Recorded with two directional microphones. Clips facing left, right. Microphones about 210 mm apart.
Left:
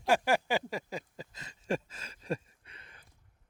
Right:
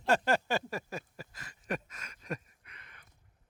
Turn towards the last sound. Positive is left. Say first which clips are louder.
# left 1 dB
turn(degrees=30)  # may be behind; listen again after turning